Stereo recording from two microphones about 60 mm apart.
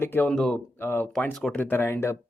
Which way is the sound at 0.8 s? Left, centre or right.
Left.